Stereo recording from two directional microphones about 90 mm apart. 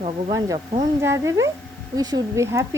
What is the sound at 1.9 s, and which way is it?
Speech, 45° right (ahead or behind).